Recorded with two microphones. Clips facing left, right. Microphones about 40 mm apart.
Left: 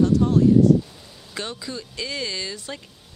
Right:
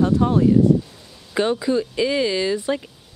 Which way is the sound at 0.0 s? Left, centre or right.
Right.